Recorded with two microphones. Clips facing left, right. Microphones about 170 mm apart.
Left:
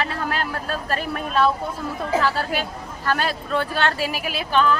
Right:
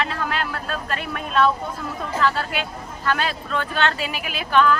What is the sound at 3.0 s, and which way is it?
Speech, 40° left (ahead or behind).